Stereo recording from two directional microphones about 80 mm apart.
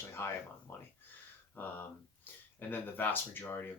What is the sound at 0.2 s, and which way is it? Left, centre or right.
Speech, left.